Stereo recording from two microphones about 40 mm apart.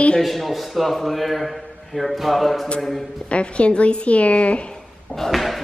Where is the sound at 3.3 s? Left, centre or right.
Left.